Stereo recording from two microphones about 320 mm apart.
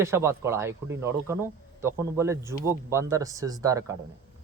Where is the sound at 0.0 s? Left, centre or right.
Centre.